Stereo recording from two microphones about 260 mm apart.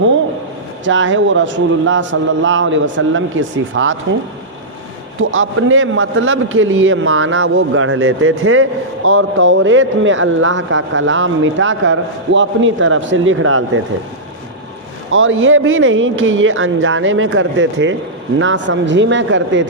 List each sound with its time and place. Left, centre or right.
0.9 s speech: right
5.2 s speech: right
15.1 s speech: right